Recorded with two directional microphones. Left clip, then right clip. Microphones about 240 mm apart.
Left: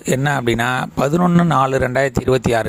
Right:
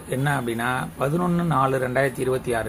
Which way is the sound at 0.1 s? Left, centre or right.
Left.